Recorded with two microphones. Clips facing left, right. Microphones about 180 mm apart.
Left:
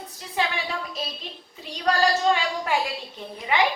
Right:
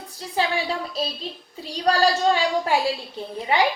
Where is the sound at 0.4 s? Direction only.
35° right (ahead or behind).